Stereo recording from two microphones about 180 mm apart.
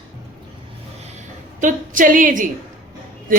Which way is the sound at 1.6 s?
45° right (ahead or behind).